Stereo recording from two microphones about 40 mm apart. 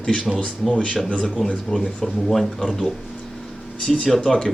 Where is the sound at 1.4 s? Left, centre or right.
Left.